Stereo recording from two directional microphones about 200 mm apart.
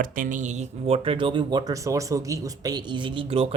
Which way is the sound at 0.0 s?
45° right (ahead or behind).